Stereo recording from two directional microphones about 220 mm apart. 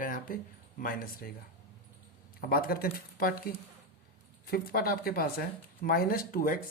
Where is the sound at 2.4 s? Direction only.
45° left (ahead or behind).